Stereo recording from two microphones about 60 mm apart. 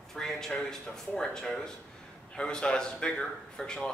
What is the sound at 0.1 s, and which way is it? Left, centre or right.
Speech, centre.